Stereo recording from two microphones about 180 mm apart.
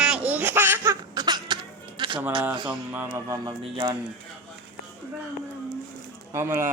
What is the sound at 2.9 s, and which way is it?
Speech, 15° right (ahead or behind).